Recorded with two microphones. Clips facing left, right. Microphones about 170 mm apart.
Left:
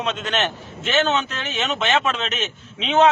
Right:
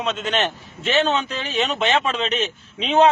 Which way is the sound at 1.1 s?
35° right (ahead or behind).